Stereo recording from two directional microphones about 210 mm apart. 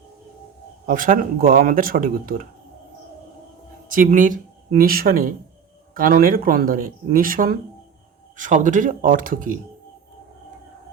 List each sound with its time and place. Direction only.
0.9 s speech: 40° right (ahead or behind)
3.8 s speech: 40° right (ahead or behind)